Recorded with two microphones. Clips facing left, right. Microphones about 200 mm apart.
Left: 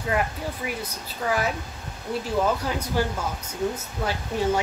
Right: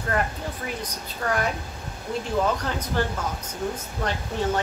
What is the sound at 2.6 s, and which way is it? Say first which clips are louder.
Speech: left 1 dB; 10° left (ahead or behind).